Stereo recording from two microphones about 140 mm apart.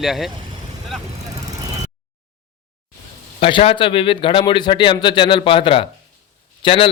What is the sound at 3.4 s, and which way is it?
A man's voice, 40° left (ahead or behind).